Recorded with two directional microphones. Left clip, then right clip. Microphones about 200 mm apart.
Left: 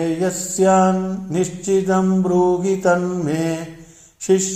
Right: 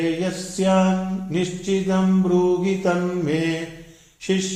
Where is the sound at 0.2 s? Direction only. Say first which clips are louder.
Left 6 dB; 45° left (ahead or behind).